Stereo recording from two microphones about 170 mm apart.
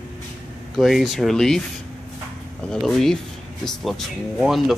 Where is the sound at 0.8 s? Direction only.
Centre (ahead or behind).